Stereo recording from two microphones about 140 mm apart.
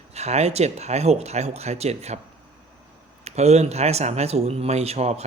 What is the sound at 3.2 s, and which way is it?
Speech, 50° right (ahead or behind).